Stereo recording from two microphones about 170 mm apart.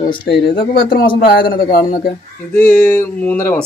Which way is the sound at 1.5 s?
60° left (ahead or behind).